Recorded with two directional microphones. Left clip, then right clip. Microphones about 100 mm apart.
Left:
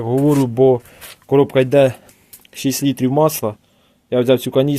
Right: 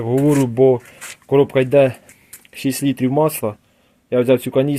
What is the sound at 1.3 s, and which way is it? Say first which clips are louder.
Speech: left 1 dB; 25° left (ahead or behind).